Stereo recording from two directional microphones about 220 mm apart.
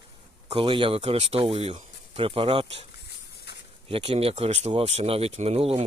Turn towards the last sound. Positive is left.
turn(degrees=-25)  # may be behind; listen again after turning